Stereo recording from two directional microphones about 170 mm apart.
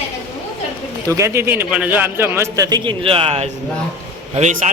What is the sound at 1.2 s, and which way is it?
A man's voice, 15° right (ahead or behind).